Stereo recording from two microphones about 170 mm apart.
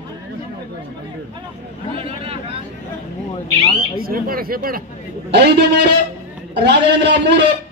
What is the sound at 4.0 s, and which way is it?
Speech, 60° right (ahead or behind).